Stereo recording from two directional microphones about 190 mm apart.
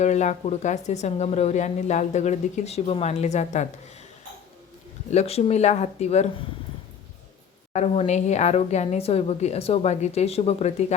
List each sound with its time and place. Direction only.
0.0 s a woman's voice: 40° left (ahead or behind)
5.1 s a woman's voice: 35° left (ahead or behind)
7.7 s a woman's voice: 35° left (ahead or behind)